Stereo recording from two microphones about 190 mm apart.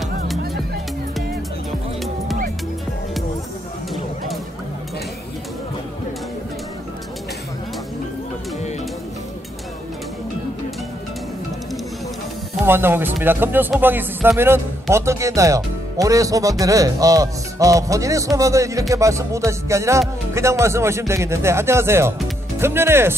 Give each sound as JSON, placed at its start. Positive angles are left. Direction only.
{"t": 12.6, "sound": "speech", "side_deg": -10}